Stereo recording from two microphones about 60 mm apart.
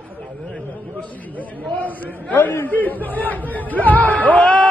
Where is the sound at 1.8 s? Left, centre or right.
Left.